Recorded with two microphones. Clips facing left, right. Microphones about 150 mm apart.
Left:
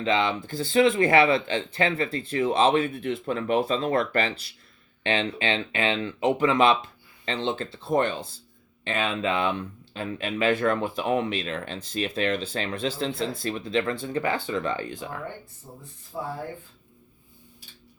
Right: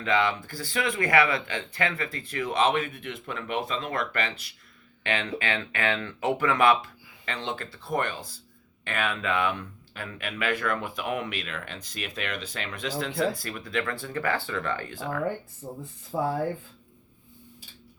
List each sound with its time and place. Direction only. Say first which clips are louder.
0.0 s speech: left 1 dB; 25° left (ahead or behind)
15.6 s speech: right 7 dB; 90° right